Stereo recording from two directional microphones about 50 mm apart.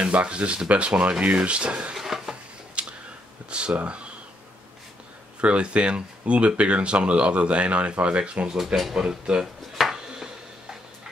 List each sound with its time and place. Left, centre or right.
0.0 s speech: right
2.0 s stir: centre
2.7 s a sound: centre
3.4 s speech: right
5.4 s speech: right
8.9 s a sound: centre